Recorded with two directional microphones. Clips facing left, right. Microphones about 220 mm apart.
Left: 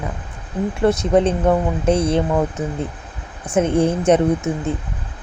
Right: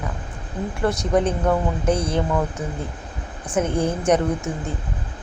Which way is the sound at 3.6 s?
25° left (ahead or behind).